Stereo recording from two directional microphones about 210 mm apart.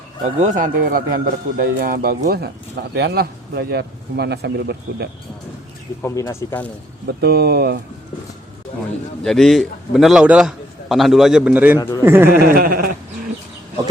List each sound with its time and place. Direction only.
0.3 s a man's voice: 35° right (ahead or behind); by 5.0 s 50° right (ahead or behind)
6.0 s speech: 15° left (ahead or behind)
7.2 s a man's voice: 50° right (ahead or behind)
9.2 s a man's voice: centre (ahead or behind)
11.8 s speech: 15° left (ahead or behind)
12.0 s speech: 10° right (ahead or behind)
12.3 s a man's voice: 45° right (ahead or behind)